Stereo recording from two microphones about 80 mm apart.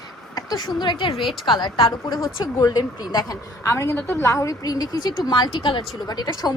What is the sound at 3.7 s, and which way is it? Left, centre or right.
Speech, left.